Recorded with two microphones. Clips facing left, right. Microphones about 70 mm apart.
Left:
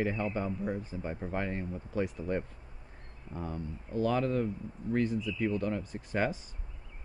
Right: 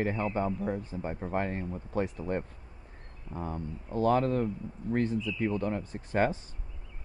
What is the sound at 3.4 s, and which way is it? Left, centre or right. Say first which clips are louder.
Speech: right 2 dB; right.